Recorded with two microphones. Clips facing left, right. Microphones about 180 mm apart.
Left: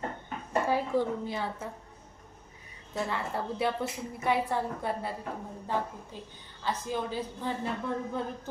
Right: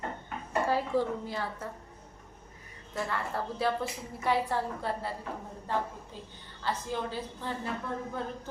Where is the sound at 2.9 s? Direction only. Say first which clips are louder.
Left 1 dB; 20° left (ahead or behind).